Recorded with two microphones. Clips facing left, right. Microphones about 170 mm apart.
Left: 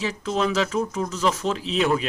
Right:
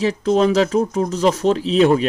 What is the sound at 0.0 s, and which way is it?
Speech, 35° right (ahead or behind).